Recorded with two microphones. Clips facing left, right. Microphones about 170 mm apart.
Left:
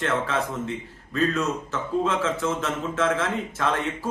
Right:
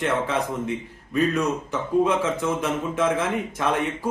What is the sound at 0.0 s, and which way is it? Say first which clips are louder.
A man's voice: right 2 dB; 15° right (ahead or behind).